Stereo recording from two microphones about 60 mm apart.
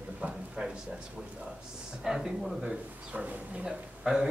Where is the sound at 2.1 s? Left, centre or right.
Centre.